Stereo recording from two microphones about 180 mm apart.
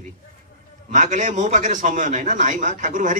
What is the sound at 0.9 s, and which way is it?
A man's voice, 45° right (ahead or behind).